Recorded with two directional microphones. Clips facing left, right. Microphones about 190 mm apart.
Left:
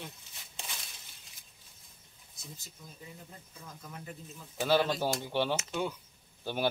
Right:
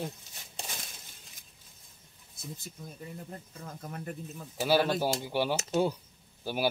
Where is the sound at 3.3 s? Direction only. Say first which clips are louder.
Right 7 dB; 50° right (ahead or behind).